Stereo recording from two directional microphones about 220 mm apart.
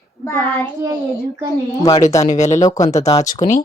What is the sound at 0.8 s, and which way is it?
Speech, 15° right (ahead or behind).